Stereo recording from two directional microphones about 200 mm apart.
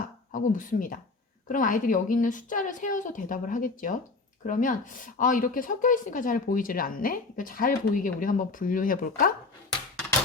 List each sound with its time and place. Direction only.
0.3 s a woman's voice: 40° left (ahead or behind)